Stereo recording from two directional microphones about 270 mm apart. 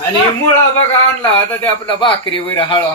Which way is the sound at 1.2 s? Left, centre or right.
Centre.